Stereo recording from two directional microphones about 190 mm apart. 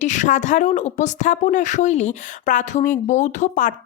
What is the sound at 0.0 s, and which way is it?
A woman's voice, 40° left (ahead or behind).